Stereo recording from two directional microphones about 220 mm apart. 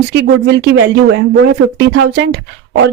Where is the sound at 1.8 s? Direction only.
50° right (ahead or behind).